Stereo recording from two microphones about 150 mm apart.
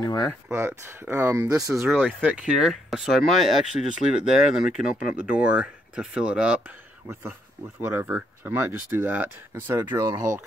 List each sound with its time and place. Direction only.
0.0 s speech: 25° left (ahead or behind)
0.5 s speech: 15° right (ahead or behind)
1.8 s speech: centre (ahead or behind)
3.8 s speech: 20° right (ahead or behind)
4.2 s speech: 5° right (ahead or behind)
7.8 s speech: 15° right (ahead or behind)